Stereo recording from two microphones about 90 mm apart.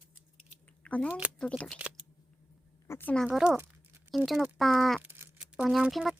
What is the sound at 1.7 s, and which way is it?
Shuffling cards, 15° right (ahead or behind).